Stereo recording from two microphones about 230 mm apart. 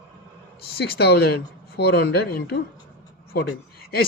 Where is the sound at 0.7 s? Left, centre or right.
Left.